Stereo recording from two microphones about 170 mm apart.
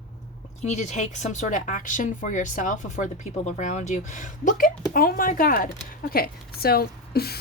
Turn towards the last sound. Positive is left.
turn(degrees=65)  # may be behind; listen again after turning